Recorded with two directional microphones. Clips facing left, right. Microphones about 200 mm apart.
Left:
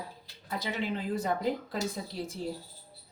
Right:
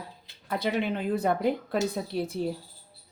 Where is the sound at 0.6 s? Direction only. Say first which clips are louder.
Right 5 dB; 65° right (ahead or behind).